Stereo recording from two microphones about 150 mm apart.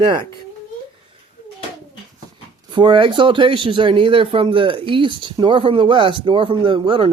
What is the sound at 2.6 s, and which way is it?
Speech, 35° right (ahead or behind).